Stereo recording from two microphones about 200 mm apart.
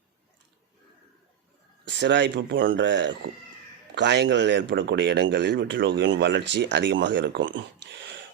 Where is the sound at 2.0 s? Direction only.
60° right (ahead or behind).